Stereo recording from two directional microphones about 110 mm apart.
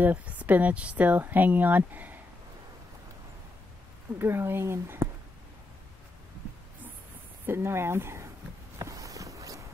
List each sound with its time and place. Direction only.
0.0 s speech: 15° right (ahead or behind)
4.2 s speech: 20° right (ahead or behind)
7.4 s speech: 20° right (ahead or behind)
8.7 s a sound: 30° right (ahead or behind)